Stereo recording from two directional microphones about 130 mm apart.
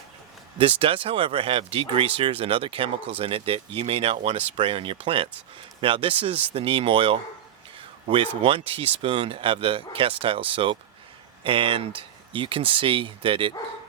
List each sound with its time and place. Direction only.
0.6 s speech: 45° right (ahead or behind)
8.4 s speech: 45° right (ahead or behind)